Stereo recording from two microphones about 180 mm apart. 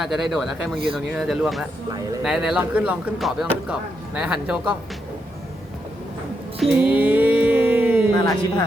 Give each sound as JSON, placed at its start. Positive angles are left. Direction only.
{"t": 0.0, "sound": "speech", "side_deg": 0}
{"t": 6.6, "sound": "a sound", "side_deg": -5}
{"t": 8.1, "sound": "speech", "side_deg": 20}